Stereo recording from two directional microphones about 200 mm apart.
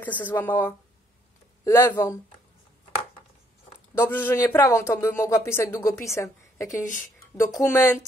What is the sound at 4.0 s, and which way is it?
A woman's voice, 10° left (ahead or behind).